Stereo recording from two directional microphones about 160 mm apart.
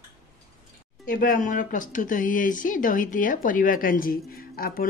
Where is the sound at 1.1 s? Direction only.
60° left (ahead or behind).